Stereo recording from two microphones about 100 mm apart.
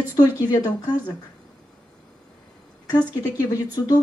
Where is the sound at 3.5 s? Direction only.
40° left (ahead or behind).